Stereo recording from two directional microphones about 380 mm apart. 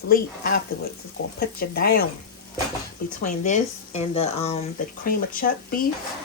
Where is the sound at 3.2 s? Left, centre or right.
Centre.